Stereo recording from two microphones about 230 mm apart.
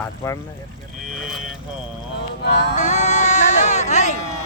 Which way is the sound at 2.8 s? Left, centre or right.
Left.